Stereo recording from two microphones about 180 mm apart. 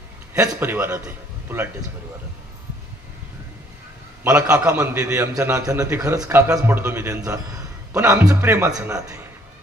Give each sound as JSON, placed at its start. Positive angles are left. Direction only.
{"t": 0.3, "sound": "a man's voice", "side_deg": -20}
{"t": 4.2, "sound": "a man's voice", "side_deg": -5}